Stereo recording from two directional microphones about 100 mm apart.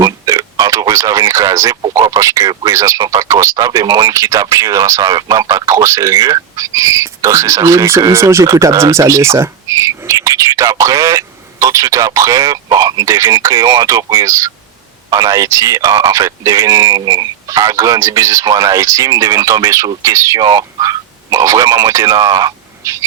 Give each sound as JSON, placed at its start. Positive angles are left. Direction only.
{"t": 0.0, "sound": "radio", "side_deg": -35}
{"t": 1.9, "sound": "speech", "side_deg": -30}